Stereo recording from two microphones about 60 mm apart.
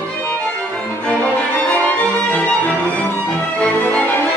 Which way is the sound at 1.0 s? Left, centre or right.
Left.